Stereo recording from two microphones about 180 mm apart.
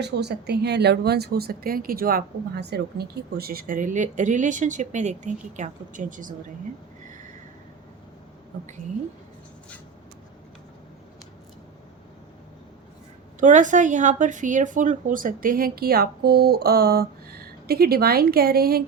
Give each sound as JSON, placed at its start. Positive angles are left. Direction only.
{"t": 0.0, "sound": "speech", "side_deg": -65}
{"t": 13.4, "sound": "speech", "side_deg": -45}